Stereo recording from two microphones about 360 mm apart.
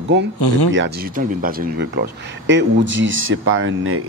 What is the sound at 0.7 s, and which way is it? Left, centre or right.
Speech, right.